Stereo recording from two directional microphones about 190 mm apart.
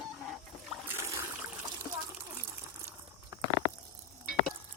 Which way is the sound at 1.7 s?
15° right (ahead or behind).